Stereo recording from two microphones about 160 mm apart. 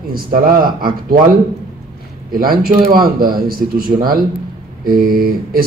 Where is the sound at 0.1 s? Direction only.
65° right (ahead or behind).